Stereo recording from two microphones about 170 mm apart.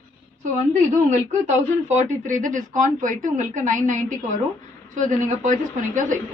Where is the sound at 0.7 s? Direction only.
45° right (ahead or behind).